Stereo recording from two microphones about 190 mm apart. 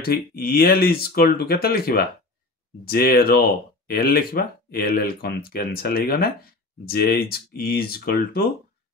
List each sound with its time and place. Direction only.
0.0 s speech: 55° left (ahead or behind)